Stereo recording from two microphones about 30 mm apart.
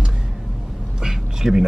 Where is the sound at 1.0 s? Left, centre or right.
Centre.